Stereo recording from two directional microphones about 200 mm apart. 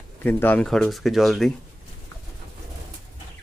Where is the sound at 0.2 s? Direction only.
10° left (ahead or behind).